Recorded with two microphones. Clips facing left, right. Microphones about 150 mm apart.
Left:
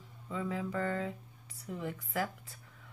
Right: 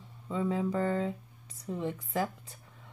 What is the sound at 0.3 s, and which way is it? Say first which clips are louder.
Speech: right 6 dB; 30° right (ahead or behind).